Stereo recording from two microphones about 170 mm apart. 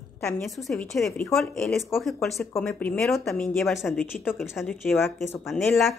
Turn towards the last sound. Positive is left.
turn(degrees=0)  # may be behind; listen again after turning